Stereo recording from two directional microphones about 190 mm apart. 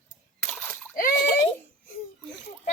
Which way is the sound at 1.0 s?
45° left (ahead or behind).